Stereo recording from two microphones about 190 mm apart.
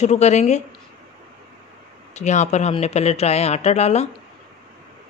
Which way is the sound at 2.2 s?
35° left (ahead or behind).